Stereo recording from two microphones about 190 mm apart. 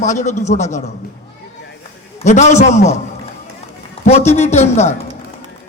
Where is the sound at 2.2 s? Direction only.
35° left (ahead or behind).